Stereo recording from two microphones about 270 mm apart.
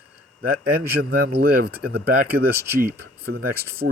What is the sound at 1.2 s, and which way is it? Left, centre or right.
Speech, right.